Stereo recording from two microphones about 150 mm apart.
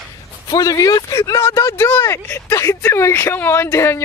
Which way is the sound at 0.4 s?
25° left (ahead or behind).